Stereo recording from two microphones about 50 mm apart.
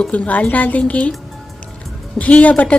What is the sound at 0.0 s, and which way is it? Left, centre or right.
A woman's voice, left.